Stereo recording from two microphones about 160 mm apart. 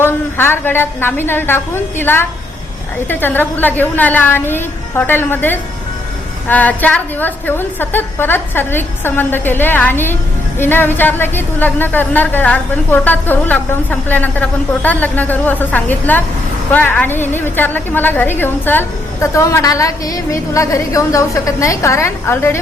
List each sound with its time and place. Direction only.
0.0 s a woman's voice: 15° left (ahead or behind)